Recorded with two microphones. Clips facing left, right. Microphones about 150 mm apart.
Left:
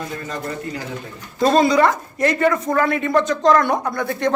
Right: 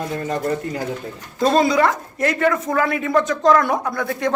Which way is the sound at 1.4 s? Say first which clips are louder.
Left 1 dB; centre (ahead or behind).